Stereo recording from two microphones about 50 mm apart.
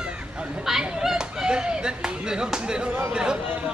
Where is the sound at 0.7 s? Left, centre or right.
Centre.